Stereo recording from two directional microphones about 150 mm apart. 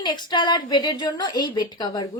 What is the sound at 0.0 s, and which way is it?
A woman's voice, 30° left (ahead or behind).